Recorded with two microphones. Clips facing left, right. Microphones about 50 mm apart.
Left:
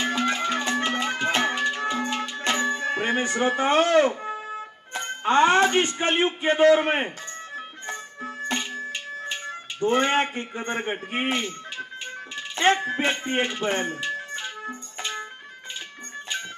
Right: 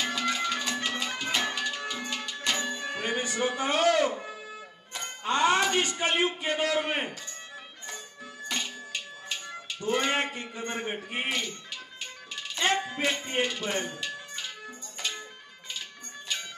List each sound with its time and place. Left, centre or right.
0.0 s music: left